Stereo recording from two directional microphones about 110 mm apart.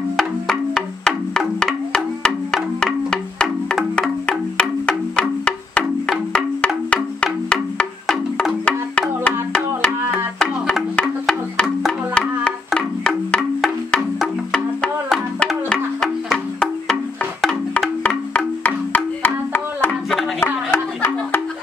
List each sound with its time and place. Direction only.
0.2 s music: 5° left (ahead or behind)